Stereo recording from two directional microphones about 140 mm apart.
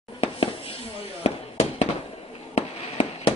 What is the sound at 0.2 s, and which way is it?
Fireworks, 45° left (ahead or behind).